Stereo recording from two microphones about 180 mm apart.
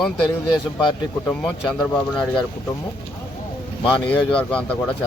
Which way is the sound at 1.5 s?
5° left (ahead or behind).